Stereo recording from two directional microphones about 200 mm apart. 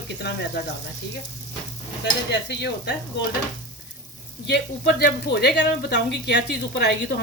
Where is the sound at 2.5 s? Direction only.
60° left (ahead or behind).